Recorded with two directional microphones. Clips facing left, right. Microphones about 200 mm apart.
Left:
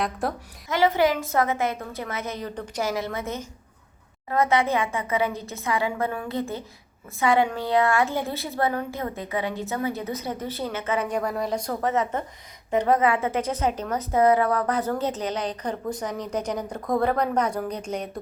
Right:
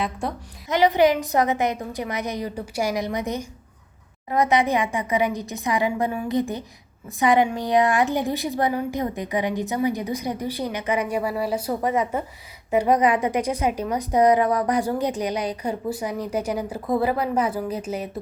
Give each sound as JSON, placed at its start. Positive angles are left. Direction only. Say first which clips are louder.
{"t": 0.0, "sound": "a woman's voice", "louder": "even", "side_deg": 0}
{"t": 0.7, "sound": "a woman's voice", "louder": "right 3 dB", "side_deg": -15}